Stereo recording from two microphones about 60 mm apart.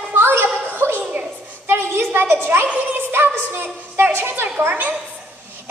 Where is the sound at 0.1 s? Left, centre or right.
Right.